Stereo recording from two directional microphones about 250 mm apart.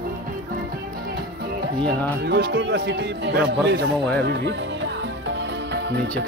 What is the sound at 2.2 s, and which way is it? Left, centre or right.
Speech, right.